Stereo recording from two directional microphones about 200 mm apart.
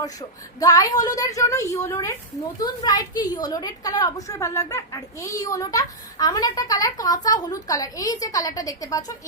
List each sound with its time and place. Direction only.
0.0 s a woman's voice: 20° left (ahead or behind)